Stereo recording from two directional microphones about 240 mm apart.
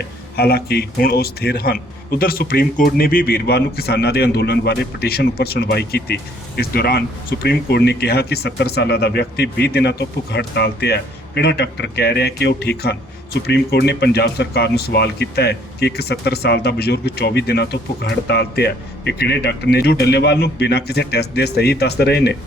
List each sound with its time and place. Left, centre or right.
0.0 s a man's voice: left